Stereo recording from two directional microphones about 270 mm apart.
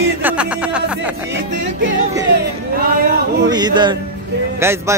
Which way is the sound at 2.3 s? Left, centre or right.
Right.